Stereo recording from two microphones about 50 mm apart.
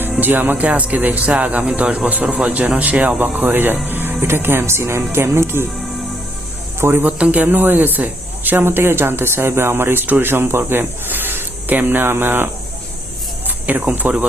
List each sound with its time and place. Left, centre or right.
0.2 s speech: right
0.6 s speech: right
3.3 s speech: right
6.7 s speech: right
7.0 s speech: right
8.6 s speech: right
13.7 s speech: right